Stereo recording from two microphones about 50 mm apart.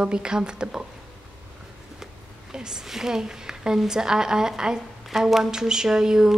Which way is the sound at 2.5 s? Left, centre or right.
Centre.